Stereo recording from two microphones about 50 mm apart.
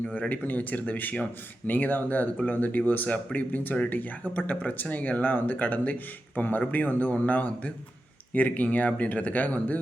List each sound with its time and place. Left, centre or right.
0.1 s speech: left